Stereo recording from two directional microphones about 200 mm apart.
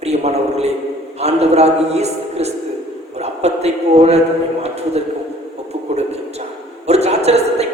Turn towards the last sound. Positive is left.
turn(degrees=-30)  # may be behind; listen again after turning